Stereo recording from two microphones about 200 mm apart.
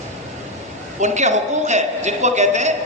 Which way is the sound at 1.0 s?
35° right (ahead or behind).